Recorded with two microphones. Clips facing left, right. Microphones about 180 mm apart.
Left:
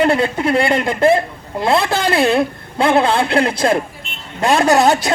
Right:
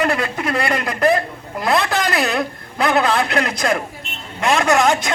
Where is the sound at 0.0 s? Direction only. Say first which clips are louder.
Left 5 dB; 30° left (ahead or behind).